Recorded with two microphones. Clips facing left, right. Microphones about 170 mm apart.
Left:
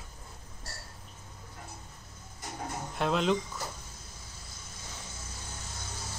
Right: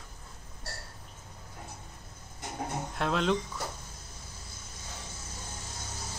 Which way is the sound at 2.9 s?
Centre (ahead or behind).